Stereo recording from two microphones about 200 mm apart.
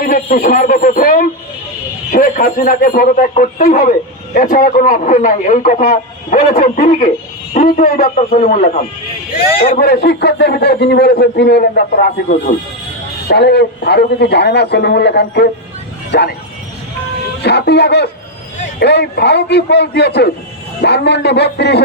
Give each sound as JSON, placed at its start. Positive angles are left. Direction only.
{"t": 0.0, "sound": "a man's voice", "side_deg": 45}
{"t": 13.2, "sound": "a man's voice", "side_deg": 55}
{"t": 17.4, "sound": "a man's voice", "side_deg": 55}